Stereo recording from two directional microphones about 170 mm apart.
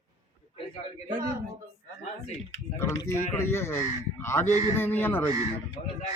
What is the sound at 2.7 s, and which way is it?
A man's voice, 15° left (ahead or behind).